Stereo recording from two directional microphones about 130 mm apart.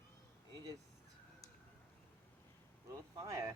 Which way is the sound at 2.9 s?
25° right (ahead or behind).